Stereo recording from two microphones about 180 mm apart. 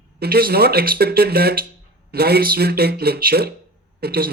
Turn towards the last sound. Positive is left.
turn(degrees=-60)  # may be behind; listen again after turning